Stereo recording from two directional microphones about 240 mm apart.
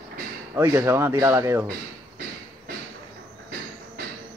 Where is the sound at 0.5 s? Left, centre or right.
Centre.